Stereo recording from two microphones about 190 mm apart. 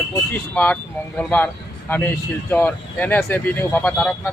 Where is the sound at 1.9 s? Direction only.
10° left (ahead or behind).